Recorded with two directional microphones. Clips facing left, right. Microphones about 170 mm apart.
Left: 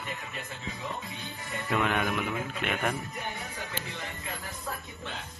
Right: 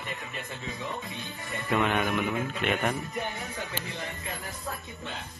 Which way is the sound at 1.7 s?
Centre (ahead or behind).